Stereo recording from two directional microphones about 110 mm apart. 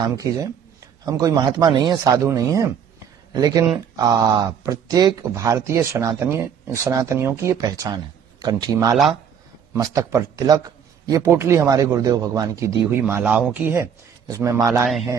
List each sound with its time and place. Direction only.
0.1 s a man's voice: 30° right (ahead or behind)
7.5 s a man's voice: 35° right (ahead or behind)
13.2 s speech: 10° right (ahead or behind)
14.2 s a man's voice: 30° right (ahead or behind)